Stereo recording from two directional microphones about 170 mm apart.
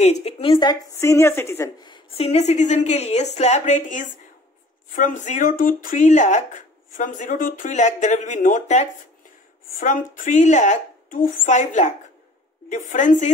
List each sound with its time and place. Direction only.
0.0 s a woman's voice: 35° left (ahead or behind)
1.0 s a woman's voice: 15° left (ahead or behind); by 13.3 s 45° left (ahead or behind)